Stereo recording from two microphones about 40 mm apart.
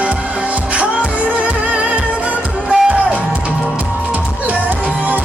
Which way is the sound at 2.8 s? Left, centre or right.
Right.